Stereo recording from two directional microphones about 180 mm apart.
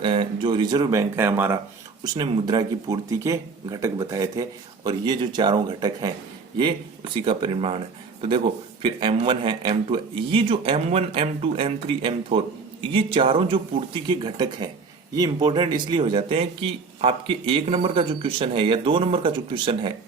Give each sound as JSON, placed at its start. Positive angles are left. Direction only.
{"t": 0.0, "sound": "speech", "side_deg": -30}
{"t": 2.1, "sound": "speech", "side_deg": -25}